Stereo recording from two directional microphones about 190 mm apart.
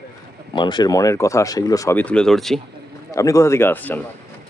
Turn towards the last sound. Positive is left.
turn(degrees=10)  # may be behind; listen again after turning